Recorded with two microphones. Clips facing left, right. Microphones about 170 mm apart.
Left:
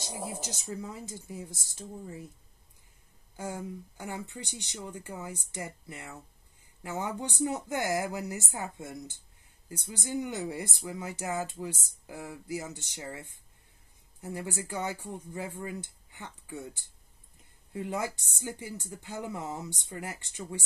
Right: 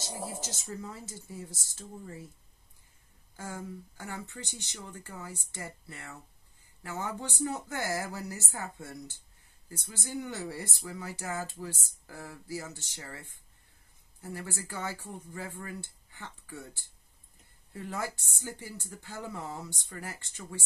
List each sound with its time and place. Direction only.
0.0 s speech: 15° left (ahead or behind)
3.3 s speech: 15° left (ahead or behind)